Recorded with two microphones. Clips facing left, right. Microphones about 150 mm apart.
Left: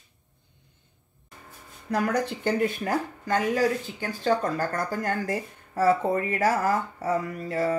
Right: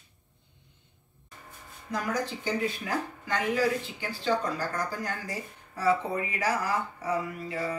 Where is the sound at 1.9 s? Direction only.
65° left (ahead or behind).